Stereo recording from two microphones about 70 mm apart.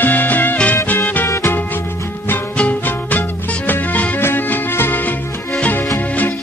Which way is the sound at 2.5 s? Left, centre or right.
Centre.